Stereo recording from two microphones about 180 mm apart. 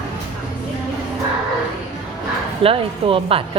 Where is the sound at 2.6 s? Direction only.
30° right (ahead or behind).